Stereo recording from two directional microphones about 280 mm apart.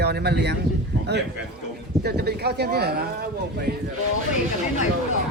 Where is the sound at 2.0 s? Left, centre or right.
Right.